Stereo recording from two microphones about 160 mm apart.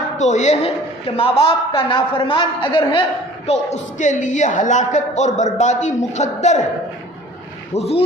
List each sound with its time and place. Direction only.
0.2 s a woman's voice: 50° left (ahead or behind)
7.7 s speech: 40° left (ahead or behind)